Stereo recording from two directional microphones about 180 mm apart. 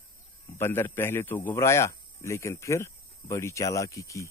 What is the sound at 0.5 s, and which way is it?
A man's voice, 15° left (ahead or behind).